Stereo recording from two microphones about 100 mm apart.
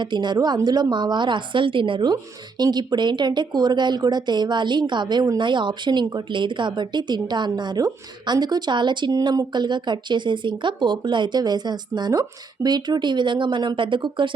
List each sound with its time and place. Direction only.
0.0 s speech: 50° right (ahead or behind)